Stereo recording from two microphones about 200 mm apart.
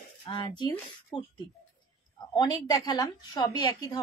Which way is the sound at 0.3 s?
25° left (ahead or behind).